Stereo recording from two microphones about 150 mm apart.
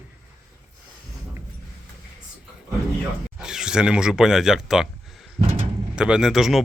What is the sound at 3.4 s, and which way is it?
Speech, 5° right (ahead or behind).